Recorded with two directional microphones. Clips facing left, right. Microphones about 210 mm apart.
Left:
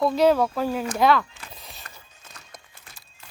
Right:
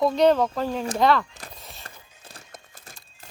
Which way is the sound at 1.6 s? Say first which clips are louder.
Right 1 dB; centre (ahead or behind).